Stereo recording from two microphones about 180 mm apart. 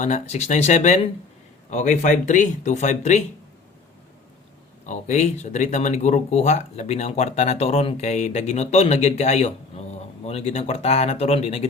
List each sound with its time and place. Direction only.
0.0 s speech: 40° left (ahead or behind)
4.9 s speech: 40° left (ahead or behind)